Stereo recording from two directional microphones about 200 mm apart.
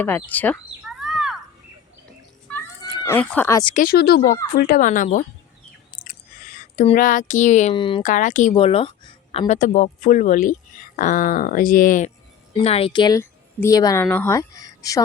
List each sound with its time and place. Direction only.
0.0 s a sound: 10° left (ahead or behind)
2.6 s cat: 10° left (ahead or behind)
3.8 s speech: 50° left (ahead or behind)
6.1 s a sound: 45° left (ahead or behind)
6.9 s speech: 40° left (ahead or behind)
7.7 s speech: 25° left (ahead or behind)
8.0 s a woman's voice: 40° left (ahead or behind)
9.5 s speech: 35° left (ahead or behind)
12.5 s a woman's voice: 30° left (ahead or behind)